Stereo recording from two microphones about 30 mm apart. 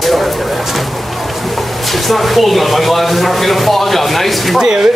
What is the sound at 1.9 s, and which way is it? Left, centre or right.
Speech, centre.